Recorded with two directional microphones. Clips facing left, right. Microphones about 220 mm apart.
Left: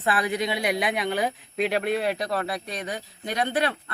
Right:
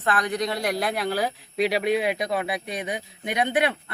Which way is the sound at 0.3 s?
5° left (ahead or behind).